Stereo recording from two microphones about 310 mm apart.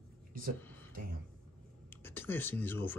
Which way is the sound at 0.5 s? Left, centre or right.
Centre.